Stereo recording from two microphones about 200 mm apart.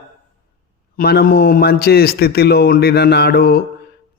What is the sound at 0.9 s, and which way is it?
A man's voice, 50° left (ahead or behind).